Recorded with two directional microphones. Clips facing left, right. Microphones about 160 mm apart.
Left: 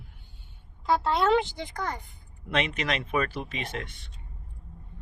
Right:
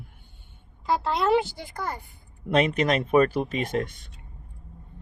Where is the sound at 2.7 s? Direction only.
45° right (ahead or behind).